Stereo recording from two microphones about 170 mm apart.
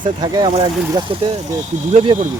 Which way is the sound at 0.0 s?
25° right (ahead or behind).